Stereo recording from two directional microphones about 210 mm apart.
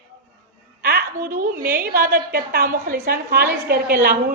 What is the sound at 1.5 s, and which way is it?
A woman's voice, 45° right (ahead or behind).